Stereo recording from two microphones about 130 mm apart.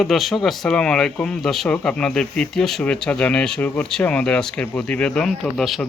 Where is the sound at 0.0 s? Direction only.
Centre (ahead or behind).